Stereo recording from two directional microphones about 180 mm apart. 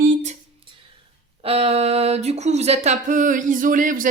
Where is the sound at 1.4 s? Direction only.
35° right (ahead or behind).